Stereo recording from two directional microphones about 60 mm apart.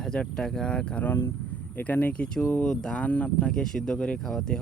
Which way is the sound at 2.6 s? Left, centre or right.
Centre.